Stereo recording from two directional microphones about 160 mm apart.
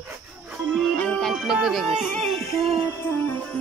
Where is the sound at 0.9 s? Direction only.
5° left (ahead or behind).